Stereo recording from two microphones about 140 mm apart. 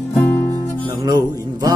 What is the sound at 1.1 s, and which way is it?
Music, 25° right (ahead or behind).